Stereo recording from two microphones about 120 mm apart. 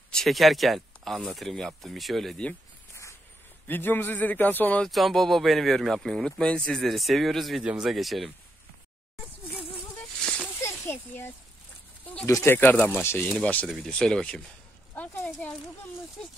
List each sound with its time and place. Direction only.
0.1 s speech: centre (ahead or behind)
3.6 s a man's voice: 15° left (ahead or behind)
4.8 s speech: centre (ahead or behind)
10.2 s a sound: 10° left (ahead or behind)
10.6 s a sound: 20° left (ahead or behind)
12.0 s a man's voice: 15° left (ahead or behind)